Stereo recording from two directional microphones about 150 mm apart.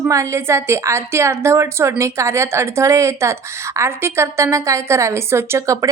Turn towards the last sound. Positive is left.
turn(degrees=-20)  # may be behind; listen again after turning